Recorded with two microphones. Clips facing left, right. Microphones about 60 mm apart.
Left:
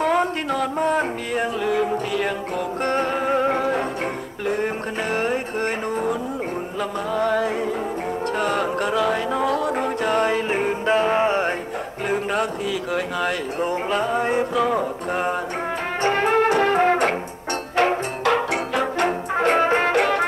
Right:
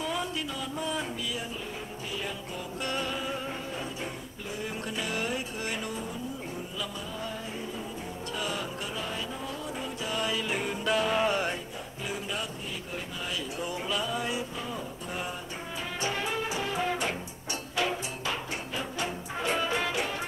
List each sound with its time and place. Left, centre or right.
0.0 s music: left
2.8 s music: left
5.1 s music: left
7.2 s music: left
8.4 s music: left
12.1 s a sound: left
13.6 s music: left
14.5 s music: left